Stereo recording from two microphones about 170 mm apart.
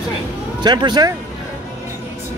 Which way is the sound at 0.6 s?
25° right (ahead or behind).